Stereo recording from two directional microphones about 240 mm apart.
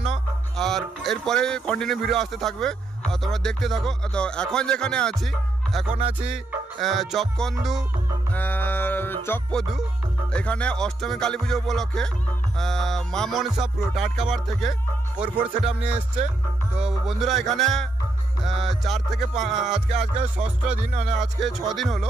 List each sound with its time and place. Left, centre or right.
0.0 s speech: centre
5.9 s music: right
6.2 s speech: centre
8.3 s music: centre
10.3 s speech: centre
16.8 s speech: centre
19.9 s music: right
21.1 s speech: centre